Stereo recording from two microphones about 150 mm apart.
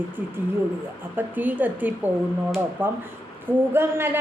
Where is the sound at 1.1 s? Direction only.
10° right (ahead or behind).